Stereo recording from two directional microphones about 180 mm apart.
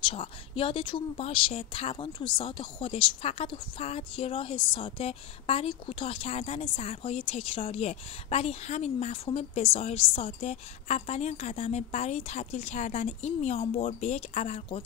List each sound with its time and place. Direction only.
0.0 s a woman's voice: 30° left (ahead or behind)